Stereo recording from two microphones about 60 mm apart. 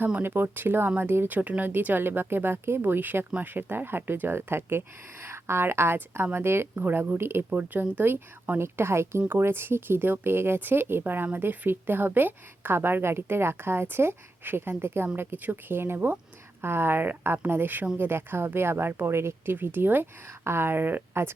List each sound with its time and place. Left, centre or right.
0.2 s speech: right
1.3 s speech: right
6.7 s speech: right
7.5 s speech: right
19.5 s speech: right